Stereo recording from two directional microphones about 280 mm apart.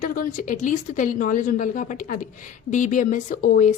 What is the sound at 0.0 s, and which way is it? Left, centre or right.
A woman's voice, left.